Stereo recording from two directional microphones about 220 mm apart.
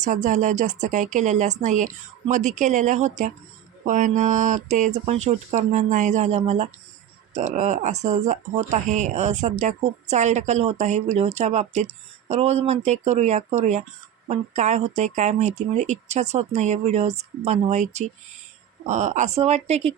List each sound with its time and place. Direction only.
0.0 s speech: 35° right (ahead or behind)